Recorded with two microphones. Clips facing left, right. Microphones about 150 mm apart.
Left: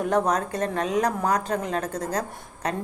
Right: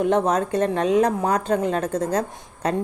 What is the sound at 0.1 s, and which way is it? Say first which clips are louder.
A woman's voice: right 3 dB; 25° right (ahead or behind).